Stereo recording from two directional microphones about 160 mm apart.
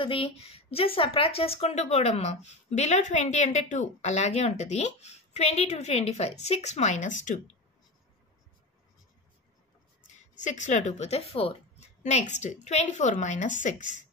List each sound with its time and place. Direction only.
0.0 s speech: 35° left (ahead or behind); by 7.3 s 50° left (ahead or behind)
10.0 s speech: 50° left (ahead or behind)